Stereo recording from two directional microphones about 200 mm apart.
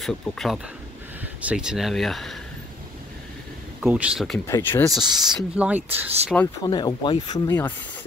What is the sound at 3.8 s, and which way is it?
Speech, 5° right (ahead or behind).